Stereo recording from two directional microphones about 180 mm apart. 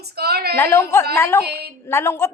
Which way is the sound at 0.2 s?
60° right (ahead or behind).